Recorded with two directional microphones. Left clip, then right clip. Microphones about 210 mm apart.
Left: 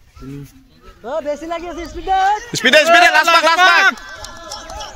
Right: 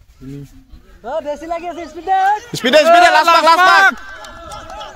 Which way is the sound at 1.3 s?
20° right (ahead or behind).